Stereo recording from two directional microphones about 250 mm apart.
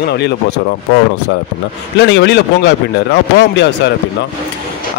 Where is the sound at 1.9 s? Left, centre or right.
Left.